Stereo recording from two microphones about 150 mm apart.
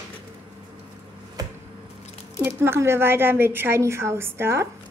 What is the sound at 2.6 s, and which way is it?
A woman's voice, 15° right (ahead or behind).